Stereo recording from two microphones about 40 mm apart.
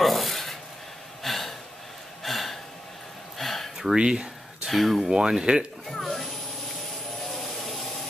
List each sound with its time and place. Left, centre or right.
0.0 s rub: centre
1.2 s gasp: centre
3.9 s a sound: right
4.6 s speech: centre
5.1 s speech: centre
5.9 s a sound: centre